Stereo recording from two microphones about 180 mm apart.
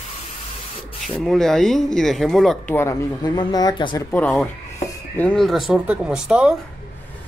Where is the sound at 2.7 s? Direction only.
15° left (ahead or behind).